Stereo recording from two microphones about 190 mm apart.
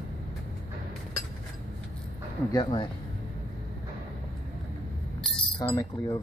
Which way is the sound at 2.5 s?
25° left (ahead or behind).